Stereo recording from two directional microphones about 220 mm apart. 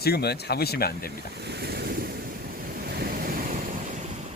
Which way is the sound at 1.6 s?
45° right (ahead or behind).